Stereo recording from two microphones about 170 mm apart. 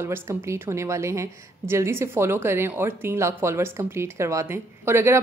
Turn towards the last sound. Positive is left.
turn(degrees=-15)  # may be behind; listen again after turning